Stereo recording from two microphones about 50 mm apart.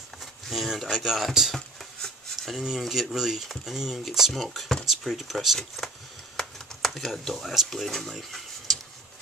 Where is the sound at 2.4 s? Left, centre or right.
Centre.